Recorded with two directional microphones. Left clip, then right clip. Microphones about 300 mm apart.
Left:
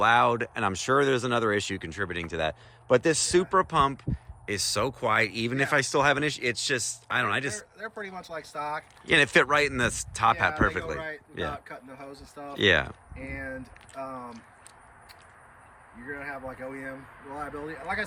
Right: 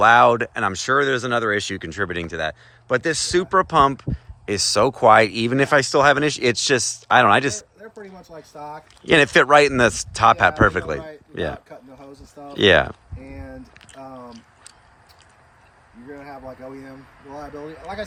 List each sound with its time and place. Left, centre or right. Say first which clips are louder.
0.0 s speech: right 9 dB; centre
11.7 s speech: right 1 dB; centre
13.2 s speech: left 3 dB; centre
13.9 s speech: left 1 dB; centre
16.0 s speech: even; centre